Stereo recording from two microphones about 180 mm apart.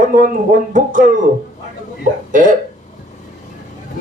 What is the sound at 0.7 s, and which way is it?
Speech, 45° right (ahead or behind).